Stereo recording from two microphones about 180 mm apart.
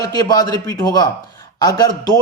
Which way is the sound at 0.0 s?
20° left (ahead or behind).